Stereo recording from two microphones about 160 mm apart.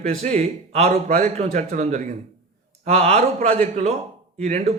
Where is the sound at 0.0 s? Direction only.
45° right (ahead or behind).